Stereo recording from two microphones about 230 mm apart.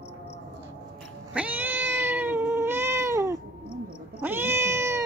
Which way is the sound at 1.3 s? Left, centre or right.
Centre.